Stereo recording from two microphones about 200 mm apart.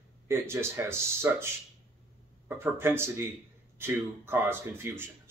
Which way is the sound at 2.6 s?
10° right (ahead or behind).